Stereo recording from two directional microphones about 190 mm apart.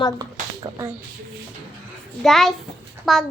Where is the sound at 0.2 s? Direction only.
20° right (ahead or behind).